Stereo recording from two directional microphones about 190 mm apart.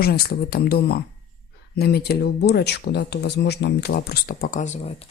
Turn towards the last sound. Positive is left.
turn(degrees=45)  # may be behind; listen again after turning